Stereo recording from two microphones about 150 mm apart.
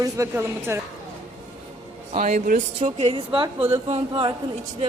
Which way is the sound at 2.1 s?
60° right (ahead or behind).